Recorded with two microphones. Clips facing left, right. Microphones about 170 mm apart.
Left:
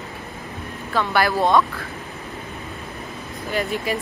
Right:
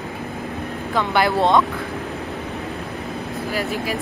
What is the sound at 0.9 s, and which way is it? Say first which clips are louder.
Speech: right 1 dB; 20° right (ahead or behind).